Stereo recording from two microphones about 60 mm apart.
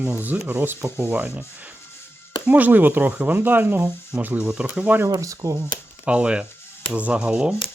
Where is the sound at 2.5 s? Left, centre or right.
Right.